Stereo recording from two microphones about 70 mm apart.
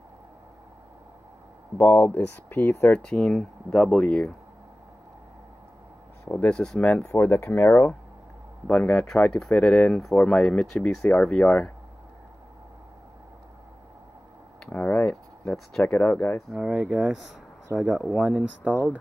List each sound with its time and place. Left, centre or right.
1.8 s speech: left
3.1 s speech: centre
6.5 s speech: centre
7.1 s speech: left
8.6 s speech: centre
14.7 s a sound: left
15.0 s a sound: centre
15.9 s speech: left
16.5 s speech: centre
18.4 s speech: centre